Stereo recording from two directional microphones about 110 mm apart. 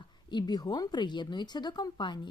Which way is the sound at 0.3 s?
40° left (ahead or behind).